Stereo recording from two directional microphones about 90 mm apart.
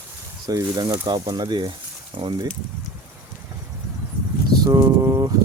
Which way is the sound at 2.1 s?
75° right (ahead or behind).